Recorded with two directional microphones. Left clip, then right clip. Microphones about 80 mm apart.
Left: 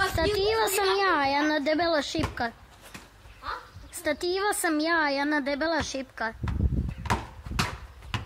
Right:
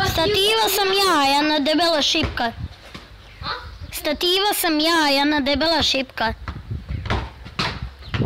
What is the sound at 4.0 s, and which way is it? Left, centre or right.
A woman's voice, right.